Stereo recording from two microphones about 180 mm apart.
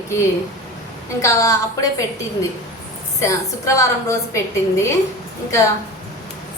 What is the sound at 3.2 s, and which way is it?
A woman's voice, 15° left (ahead or behind).